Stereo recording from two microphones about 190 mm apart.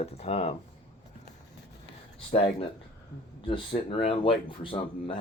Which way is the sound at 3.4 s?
30° left (ahead or behind).